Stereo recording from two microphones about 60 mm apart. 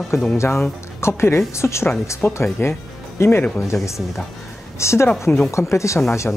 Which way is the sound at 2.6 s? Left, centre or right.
Left.